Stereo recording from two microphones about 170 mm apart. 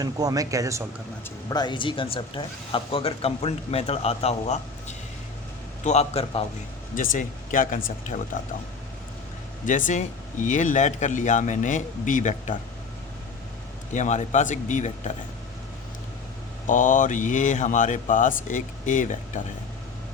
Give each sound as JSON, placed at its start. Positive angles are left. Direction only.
{"t": 0.0, "sound": "speech", "side_deg": -20}
{"t": 1.5, "sound": "speech", "side_deg": 25}
{"t": 6.9, "sound": "speech", "side_deg": 50}
{"t": 9.6, "sound": "speech", "side_deg": 50}
{"t": 13.9, "sound": "speech", "side_deg": 45}
{"t": 16.6, "sound": "speech", "side_deg": 50}